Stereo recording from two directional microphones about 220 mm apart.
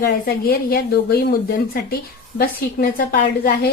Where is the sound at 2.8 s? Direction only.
40° left (ahead or behind).